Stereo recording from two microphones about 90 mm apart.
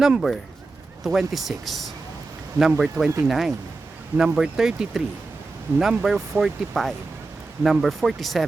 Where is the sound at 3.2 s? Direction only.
Centre (ahead or behind).